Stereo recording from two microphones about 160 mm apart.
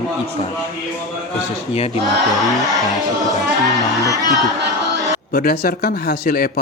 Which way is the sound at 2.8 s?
25° left (ahead or behind).